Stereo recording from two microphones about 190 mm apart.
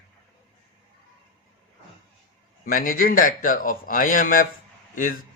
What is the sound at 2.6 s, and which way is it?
Speech, 50° left (ahead or behind).